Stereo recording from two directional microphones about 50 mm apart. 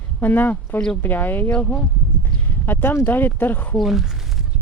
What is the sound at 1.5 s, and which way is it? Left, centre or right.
Speech, left.